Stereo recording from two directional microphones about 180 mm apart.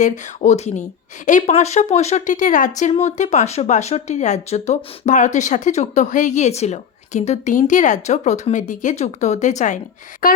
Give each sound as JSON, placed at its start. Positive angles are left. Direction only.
{"t": 0.0, "sound": "speech", "side_deg": 40}